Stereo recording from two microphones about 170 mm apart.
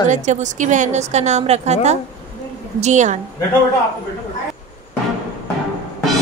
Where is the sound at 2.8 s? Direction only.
45° right (ahead or behind).